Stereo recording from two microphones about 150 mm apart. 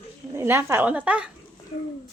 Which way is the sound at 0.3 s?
15° right (ahead or behind).